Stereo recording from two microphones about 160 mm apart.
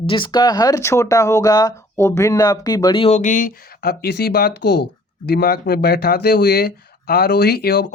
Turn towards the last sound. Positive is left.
turn(degrees=75)  # may be behind; listen again after turning